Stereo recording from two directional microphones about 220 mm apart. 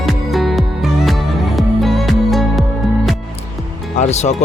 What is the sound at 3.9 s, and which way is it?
Speech, 30° left (ahead or behind).